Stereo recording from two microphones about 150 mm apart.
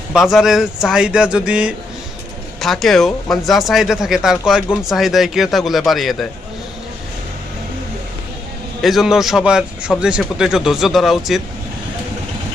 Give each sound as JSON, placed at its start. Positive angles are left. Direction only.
{"t": 0.1, "sound": "speech", "side_deg": 0}
{"t": 8.8, "sound": "speech", "side_deg": 0}